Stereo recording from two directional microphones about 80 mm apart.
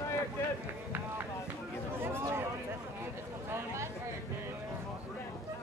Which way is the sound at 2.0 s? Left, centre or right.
Right.